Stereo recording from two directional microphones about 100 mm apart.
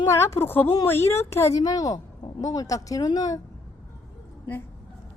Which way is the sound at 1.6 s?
35° left (ahead or behind).